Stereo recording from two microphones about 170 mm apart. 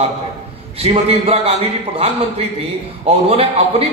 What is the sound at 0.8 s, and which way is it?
A man's voice, 35° right (ahead or behind).